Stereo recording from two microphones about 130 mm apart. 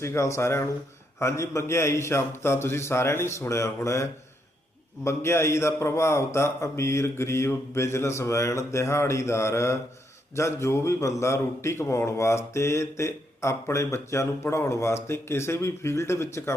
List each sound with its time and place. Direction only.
0.0 s a man's voice: 20° left (ahead or behind)